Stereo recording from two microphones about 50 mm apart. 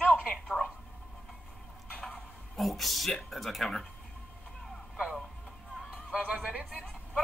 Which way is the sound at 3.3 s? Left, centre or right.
Centre.